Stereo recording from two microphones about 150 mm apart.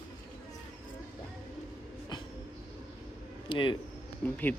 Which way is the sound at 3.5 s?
35° left (ahead or behind).